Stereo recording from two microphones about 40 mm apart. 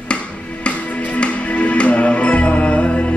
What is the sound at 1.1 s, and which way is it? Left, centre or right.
Music, left.